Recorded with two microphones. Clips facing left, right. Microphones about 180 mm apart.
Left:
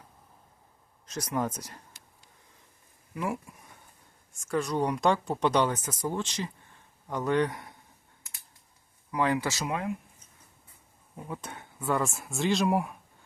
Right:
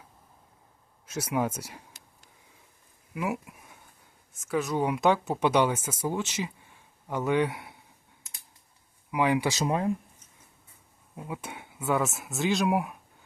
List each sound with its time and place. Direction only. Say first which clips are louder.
1.0 s speech: right 2 dB; 5° right (ahead or behind)
3.2 s speech: right 1 dB; 5° right (ahead or behind)
9.1 s speech: right 2 dB; 15° right (ahead or behind)
9.6 s speech: right 5 dB; 35° right (ahead or behind)
11.3 s speech: right 1 dB; 10° right (ahead or behind)